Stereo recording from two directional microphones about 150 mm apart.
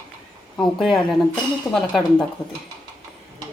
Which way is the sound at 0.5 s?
Centre (ahead or behind).